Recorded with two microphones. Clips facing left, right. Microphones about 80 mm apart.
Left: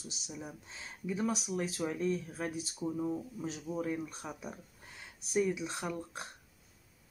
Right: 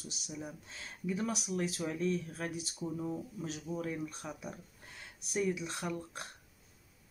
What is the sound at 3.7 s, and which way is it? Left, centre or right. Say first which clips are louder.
Speech: left 2 dB; centre.